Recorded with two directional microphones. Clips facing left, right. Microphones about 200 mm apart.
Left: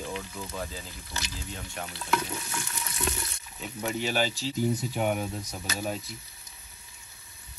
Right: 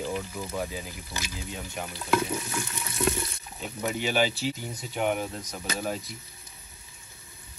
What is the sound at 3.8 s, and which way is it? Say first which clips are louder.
Speech: right 2 dB; centre (ahead or behind).